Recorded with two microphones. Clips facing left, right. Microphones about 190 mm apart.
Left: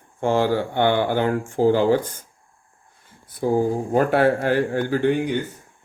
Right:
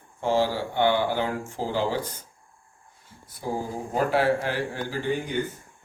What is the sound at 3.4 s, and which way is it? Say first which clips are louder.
Speech: left 10 dB; 60° left (ahead or behind).